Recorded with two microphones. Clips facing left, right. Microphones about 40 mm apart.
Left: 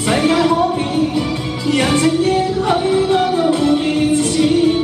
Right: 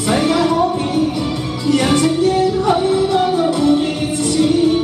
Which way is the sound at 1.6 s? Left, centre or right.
Left.